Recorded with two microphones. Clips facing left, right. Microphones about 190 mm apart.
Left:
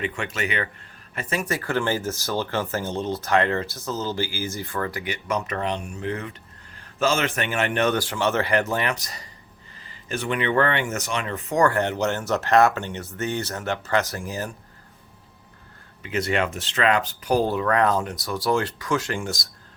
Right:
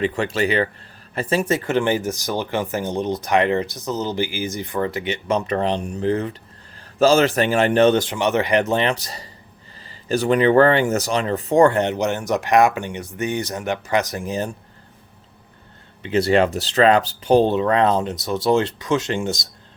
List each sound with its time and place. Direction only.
0.0 s a man's voice: 30° right (ahead or behind)
16.0 s speech: 30° right (ahead or behind)